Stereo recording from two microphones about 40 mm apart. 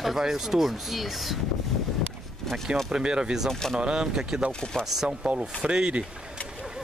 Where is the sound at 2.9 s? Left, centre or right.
Right.